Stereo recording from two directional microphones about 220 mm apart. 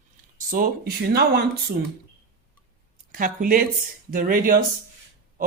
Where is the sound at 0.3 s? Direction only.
40° right (ahead or behind).